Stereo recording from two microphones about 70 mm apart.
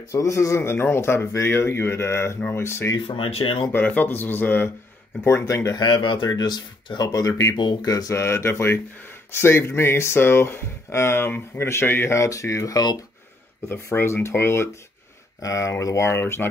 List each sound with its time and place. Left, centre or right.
0.1 s speech: left
3.4 s speech: left
3.7 s speech: left
5.4 s speech: left
5.8 s speech: left
7.5 s speech: left
12.2 s speech: left
13.7 s speech: left
15.4 s speech: left
16.1 s speech: left